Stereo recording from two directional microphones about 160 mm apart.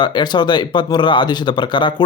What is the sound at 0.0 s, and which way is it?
Speech, 25° left (ahead or behind).